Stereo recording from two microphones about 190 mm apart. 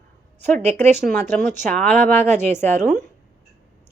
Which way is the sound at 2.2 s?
35° right (ahead or behind).